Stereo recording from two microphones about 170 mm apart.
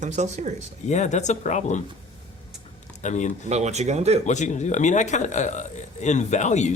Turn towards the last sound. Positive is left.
turn(degrees=45)  # may be behind; listen again after turning